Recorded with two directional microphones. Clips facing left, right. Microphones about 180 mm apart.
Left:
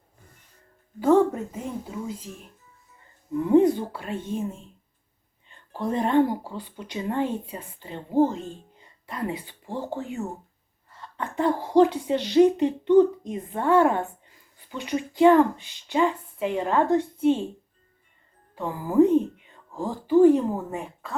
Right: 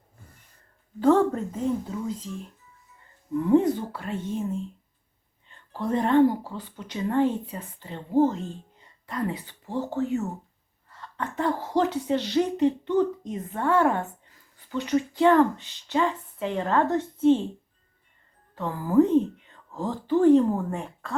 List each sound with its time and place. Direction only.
0.9 s speech: 10° left (ahead or behind)
3.7 s speech: 15° left (ahead or behind)
5.5 s speech: 15° left (ahead or behind)
18.5 s a woman's voice: 15° left (ahead or behind)